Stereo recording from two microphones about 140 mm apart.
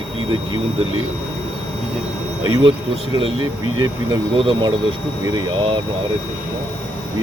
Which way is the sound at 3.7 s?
35° right (ahead or behind).